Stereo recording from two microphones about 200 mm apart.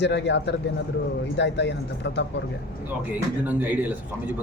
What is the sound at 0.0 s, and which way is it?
Speech, 60° left (ahead or behind).